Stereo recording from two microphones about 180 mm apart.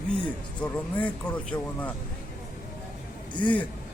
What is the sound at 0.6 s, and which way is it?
Speech, 10° left (ahead or behind).